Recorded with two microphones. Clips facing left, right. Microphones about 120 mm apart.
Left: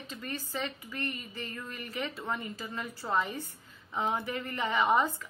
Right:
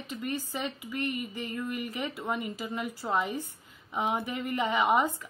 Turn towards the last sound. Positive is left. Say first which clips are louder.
# right 1 dB
turn(degrees=-15)  # may be behind; listen again after turning